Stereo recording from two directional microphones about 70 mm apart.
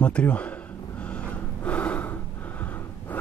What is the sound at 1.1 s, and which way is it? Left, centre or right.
Snort, centre.